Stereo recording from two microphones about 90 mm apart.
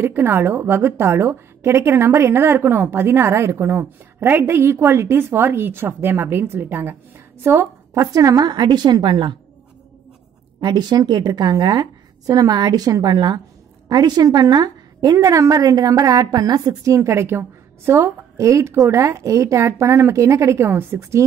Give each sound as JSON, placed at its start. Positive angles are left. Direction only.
{"t": 0.0, "sound": "a woman's voice", "side_deg": -25}
{"t": 10.6, "sound": "a woman's voice", "side_deg": -50}
{"t": 15.1, "sound": "a woman's voice", "side_deg": -35}